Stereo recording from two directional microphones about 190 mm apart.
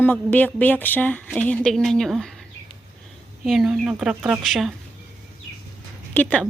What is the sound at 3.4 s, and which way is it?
A woman's voice, centre (ahead or behind).